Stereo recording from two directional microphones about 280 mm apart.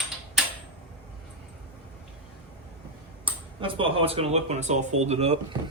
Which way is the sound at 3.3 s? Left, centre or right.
Centre.